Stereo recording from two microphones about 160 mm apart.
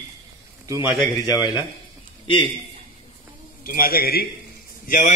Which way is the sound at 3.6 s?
65° left (ahead or behind).